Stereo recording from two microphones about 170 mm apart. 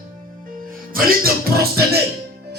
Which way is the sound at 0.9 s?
60° right (ahead or behind).